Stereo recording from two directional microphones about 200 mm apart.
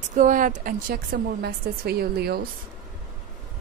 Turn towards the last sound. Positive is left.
turn(degrees=-50)  # may be behind; listen again after turning